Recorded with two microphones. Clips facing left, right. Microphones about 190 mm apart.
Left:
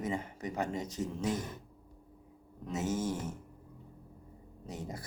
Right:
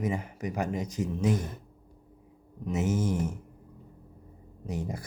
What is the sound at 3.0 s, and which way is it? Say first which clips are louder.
Speech: right 6 dB; 15° right (ahead or behind).